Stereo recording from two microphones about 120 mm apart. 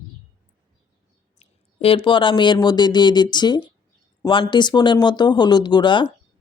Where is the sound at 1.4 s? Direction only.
50° left (ahead or behind).